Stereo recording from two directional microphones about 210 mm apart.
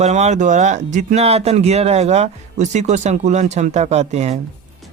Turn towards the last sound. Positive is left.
turn(degrees=-30)  # may be behind; listen again after turning